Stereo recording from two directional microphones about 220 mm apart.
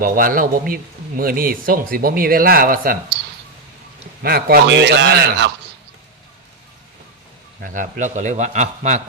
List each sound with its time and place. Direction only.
0.0 s speech: 40° right (ahead or behind)
4.2 s a man's voice: 45° right (ahead or behind)
7.6 s speech: 35° right (ahead or behind)